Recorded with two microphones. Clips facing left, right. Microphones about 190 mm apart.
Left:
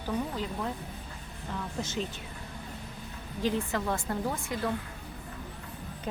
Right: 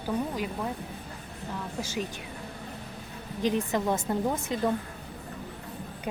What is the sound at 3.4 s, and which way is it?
A woman's voice, 20° right (ahead or behind).